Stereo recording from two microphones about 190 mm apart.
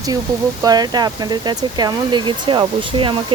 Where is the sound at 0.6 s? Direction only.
20° right (ahead or behind).